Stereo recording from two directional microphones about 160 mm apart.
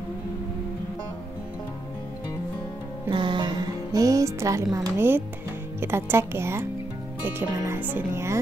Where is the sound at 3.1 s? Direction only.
30° right (ahead or behind).